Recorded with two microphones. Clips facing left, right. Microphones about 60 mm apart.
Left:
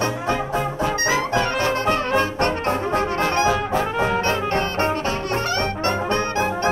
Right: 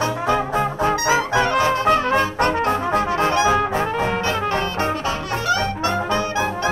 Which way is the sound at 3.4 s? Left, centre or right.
Right.